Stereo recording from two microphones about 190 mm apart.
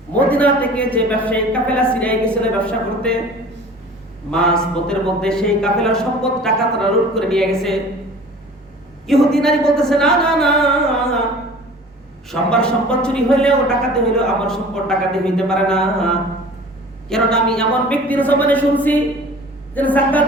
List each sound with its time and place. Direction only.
0.1 s a woman's voice: 5° left (ahead or behind)
4.3 s a woman's voice: 5° left (ahead or behind)
9.0 s a woman's voice: centre (ahead or behind)
12.3 s a woman's voice: 5° left (ahead or behind)